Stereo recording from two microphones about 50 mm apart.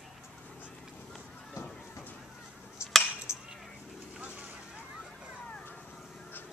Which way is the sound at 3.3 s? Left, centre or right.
Left.